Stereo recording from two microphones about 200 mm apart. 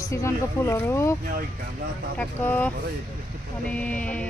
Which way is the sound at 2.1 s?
10° left (ahead or behind).